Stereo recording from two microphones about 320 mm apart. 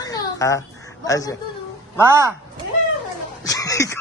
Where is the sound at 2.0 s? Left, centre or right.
Centre.